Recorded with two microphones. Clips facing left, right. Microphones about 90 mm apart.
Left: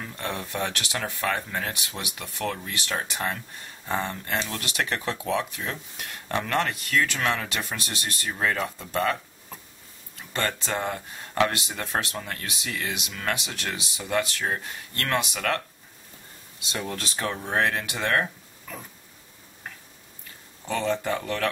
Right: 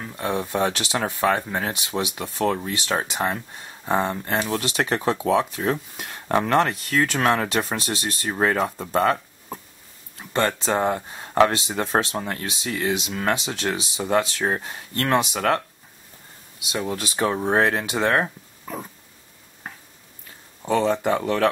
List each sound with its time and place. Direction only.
0.0 s speech: 15° right (ahead or behind)
16.7 s speech: 15° right (ahead or behind)
20.7 s speech: 20° right (ahead or behind)